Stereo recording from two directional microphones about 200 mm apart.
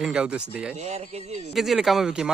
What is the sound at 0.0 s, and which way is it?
Speech, 5° right (ahead or behind).